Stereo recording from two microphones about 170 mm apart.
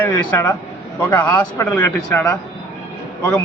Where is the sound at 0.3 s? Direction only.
15° left (ahead or behind).